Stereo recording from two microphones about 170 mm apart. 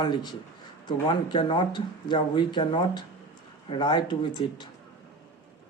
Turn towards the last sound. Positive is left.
turn(degrees=25)  # may be behind; listen again after turning